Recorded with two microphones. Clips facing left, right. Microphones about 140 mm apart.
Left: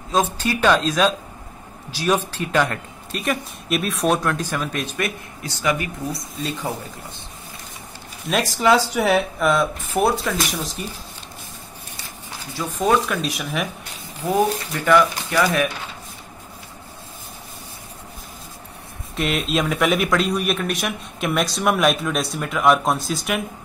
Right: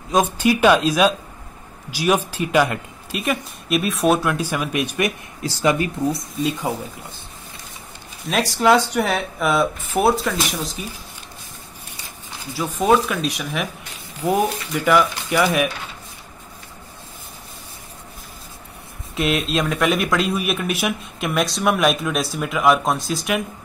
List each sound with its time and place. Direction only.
0.1 s speech: 15° right (ahead or behind)
5.4 s speech: 30° right (ahead or behind)
8.3 s speech: centre (ahead or behind)
12.5 s speech: 5° right (ahead or behind)
14.2 s speech: 10° right (ahead or behind)
19.1 s speech: centre (ahead or behind)